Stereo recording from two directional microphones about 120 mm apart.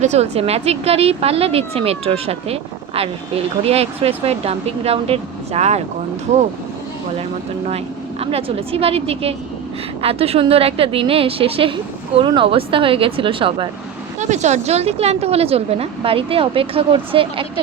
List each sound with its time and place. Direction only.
0.0 s a woman's voice: 65° right (ahead or behind)
8.2 s a woman's voice: 50° right (ahead or behind)
14.2 s a woman's voice: 75° right (ahead or behind); by 17.4 s 50° right (ahead or behind)